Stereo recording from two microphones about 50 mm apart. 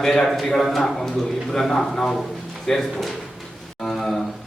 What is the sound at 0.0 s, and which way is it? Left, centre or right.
A man's voice, centre.